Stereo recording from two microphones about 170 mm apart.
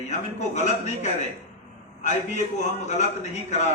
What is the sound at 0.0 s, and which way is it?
A man's voice, 45° left (ahead or behind).